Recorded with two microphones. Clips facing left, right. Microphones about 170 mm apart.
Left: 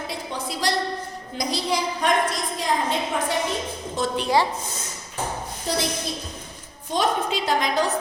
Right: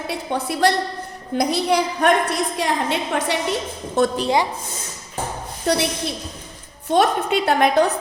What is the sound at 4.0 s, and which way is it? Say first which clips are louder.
Speech: right 8 dB; 60° right (ahead or behind).